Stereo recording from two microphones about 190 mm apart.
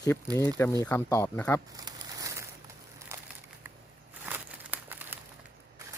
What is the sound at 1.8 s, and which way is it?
Crumpling, 20° right (ahead or behind).